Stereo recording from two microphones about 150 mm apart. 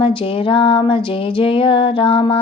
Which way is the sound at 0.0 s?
35° left (ahead or behind).